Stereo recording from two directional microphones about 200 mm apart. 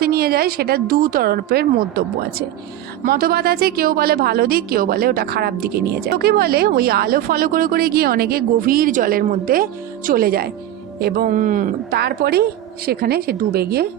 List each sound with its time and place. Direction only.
0.0 s a woman's voice: 50° right (ahead or behind)